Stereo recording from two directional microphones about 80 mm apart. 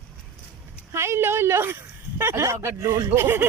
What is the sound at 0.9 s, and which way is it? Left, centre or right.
Speech, right.